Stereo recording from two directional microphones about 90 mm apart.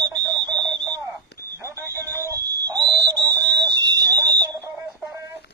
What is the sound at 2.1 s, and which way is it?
Alarm, 40° right (ahead or behind).